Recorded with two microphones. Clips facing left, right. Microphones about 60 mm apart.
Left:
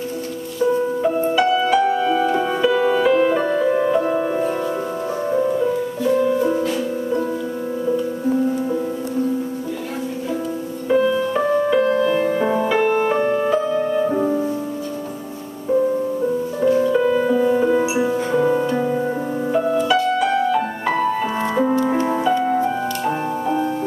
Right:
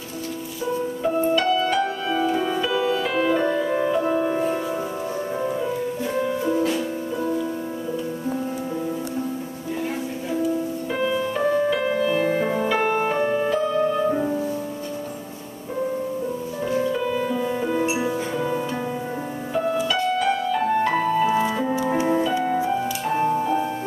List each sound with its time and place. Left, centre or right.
1.0 s music: centre
10.9 s music: centre
16.7 s music: centre
18.3 s music: left
19.9 s music: centre